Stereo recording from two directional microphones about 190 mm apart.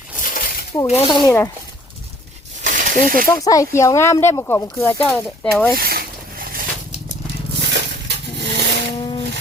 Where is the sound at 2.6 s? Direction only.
45° right (ahead or behind).